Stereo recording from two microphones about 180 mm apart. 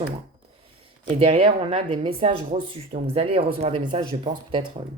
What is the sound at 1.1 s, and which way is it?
Speech, 35° right (ahead or behind).